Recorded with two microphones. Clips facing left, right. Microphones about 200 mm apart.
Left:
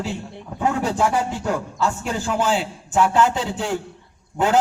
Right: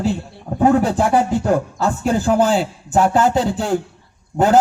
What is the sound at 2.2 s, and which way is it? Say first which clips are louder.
A man's voice: right 5 dB; 40° right (ahead or behind).